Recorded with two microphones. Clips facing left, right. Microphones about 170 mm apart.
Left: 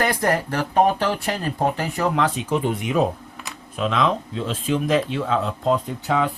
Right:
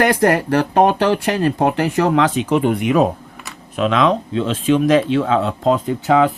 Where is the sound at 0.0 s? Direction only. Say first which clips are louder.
Right 6 dB; 80° right.